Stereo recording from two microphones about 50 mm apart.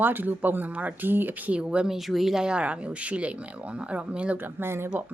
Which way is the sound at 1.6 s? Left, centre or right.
Right.